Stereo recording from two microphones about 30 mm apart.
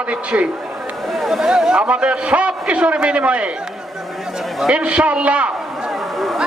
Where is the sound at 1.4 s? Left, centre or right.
Centre.